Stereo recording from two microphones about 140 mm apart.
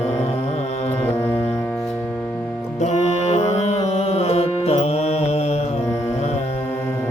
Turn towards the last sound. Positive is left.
turn(degrees=50)  # may be behind; listen again after turning